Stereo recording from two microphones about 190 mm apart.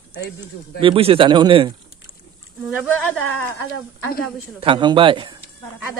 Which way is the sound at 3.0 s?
5° left (ahead or behind).